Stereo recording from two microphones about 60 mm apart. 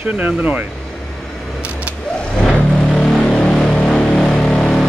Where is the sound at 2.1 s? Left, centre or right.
Centre.